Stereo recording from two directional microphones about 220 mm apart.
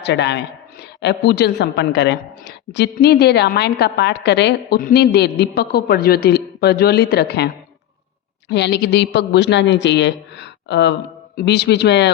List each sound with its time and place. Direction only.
0.0 s a woman's voice: 50° left (ahead or behind)